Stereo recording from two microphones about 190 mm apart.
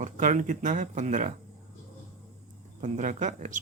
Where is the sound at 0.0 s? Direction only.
40° right (ahead or behind).